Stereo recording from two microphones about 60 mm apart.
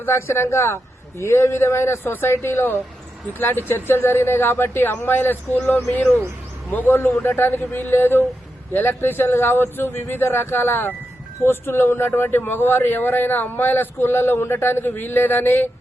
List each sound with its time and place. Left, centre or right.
0.0 s a man's voice: left